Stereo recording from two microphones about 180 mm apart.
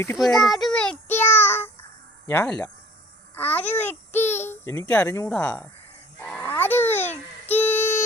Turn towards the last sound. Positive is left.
turn(degrees=10)  # may be behind; listen again after turning